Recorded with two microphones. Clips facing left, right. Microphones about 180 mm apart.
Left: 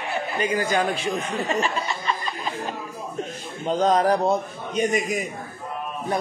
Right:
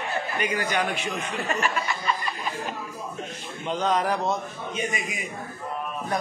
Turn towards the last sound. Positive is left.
turn(degrees=40)  # may be behind; listen again after turning